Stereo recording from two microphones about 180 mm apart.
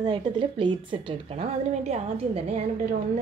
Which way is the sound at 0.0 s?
25° right (ahead or behind).